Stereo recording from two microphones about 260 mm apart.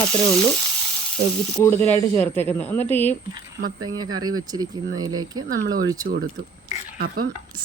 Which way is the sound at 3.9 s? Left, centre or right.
Centre.